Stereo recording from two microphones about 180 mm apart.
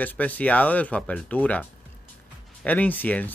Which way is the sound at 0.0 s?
10° left (ahead or behind).